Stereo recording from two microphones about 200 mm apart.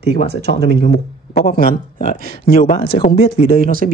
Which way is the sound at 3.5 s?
45° right (ahead or behind).